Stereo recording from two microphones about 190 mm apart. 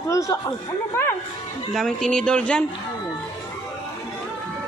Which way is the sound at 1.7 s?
Centre (ahead or behind).